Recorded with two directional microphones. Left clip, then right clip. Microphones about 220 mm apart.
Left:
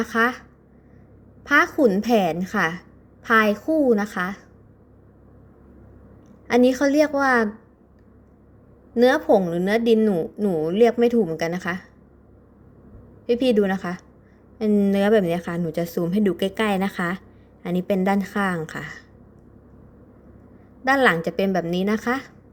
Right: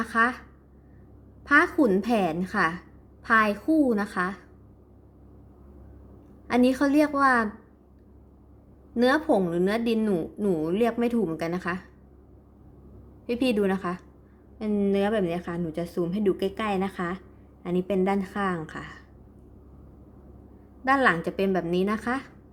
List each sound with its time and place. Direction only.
0.0 s speech: 15° left (ahead or behind)
1.5 s speech: 10° left (ahead or behind)
6.7 s speech: 10° left (ahead or behind)
9.0 s speech: 15° left (ahead or behind)
13.2 s speech: 10° left (ahead or behind)
20.8 s speech: 15° left (ahead or behind)